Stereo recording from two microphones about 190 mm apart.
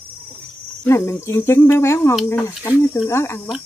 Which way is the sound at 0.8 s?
15° left (ahead or behind).